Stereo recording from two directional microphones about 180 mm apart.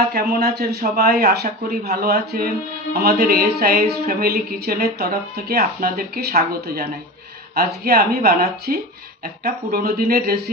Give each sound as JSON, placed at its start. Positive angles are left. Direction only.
{"t": 0.1, "sound": "speech", "side_deg": -65}